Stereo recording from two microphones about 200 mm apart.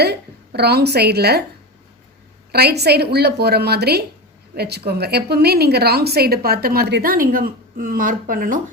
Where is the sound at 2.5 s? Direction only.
55° right (ahead or behind).